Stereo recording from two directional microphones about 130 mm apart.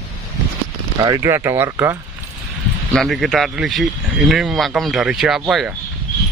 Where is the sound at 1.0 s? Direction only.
25° right (ahead or behind).